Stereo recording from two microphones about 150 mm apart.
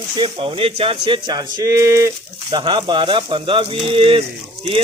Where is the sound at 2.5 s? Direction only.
35° right (ahead or behind).